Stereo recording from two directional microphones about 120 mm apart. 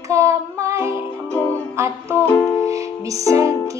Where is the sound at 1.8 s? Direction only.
20° right (ahead or behind).